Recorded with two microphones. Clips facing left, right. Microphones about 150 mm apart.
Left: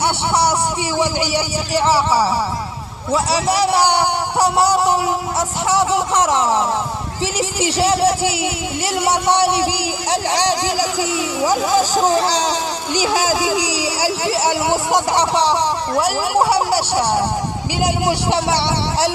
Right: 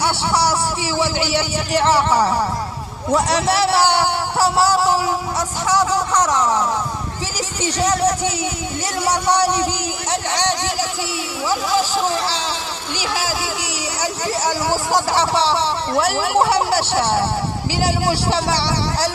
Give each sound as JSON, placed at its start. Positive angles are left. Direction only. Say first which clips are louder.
{"t": 0.0, "sound": "a sound", "louder": "left 1 dB", "side_deg": 20}
{"t": 0.9, "sound": "a man's voice", "louder": "even", "side_deg": 15}
{"t": 7.7, "sound": "a man's voice", "louder": "left 1 dB", "side_deg": 30}
{"t": 12.3, "sound": "speech", "louder": "left 6 dB", "side_deg": 45}
{"t": 13.2, "sound": "a man's voice", "louder": "left 6 dB", "side_deg": 15}
{"t": 14.3, "sound": "speech", "louder": "left 2 dB", "side_deg": 70}
{"t": 14.7, "sound": "a man's voice", "louder": "left 2 dB", "side_deg": 20}